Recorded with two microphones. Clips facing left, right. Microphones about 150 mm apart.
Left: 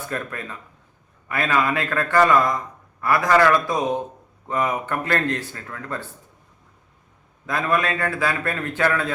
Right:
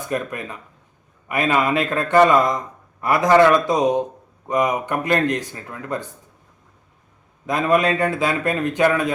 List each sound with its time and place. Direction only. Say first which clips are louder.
0.1 s a man's voice: right 6 dB; 15° right (ahead or behind)
7.4 s a man's voice: right 5 dB; 20° right (ahead or behind)